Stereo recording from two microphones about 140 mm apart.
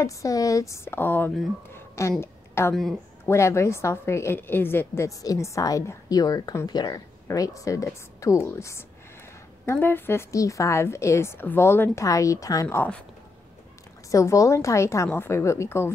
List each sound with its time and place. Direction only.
0.0 s a woman's voice: 25° left (ahead or behind)
1.7 s a sound: 20° left (ahead or behind)
2.7 s speech: centre (ahead or behind)
3.3 s a woman's voice: 20° left (ahead or behind)
14.1 s a woman's voice: 25° left (ahead or behind)